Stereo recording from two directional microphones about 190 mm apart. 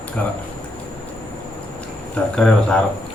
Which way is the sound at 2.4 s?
5° left (ahead or behind).